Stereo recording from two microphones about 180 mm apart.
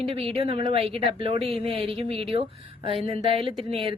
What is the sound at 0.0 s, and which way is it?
A woman's voice, 30° right (ahead or behind).